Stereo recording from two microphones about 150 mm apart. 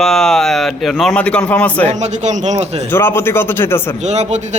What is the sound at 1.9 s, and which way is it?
Speech, 50° right (ahead or behind).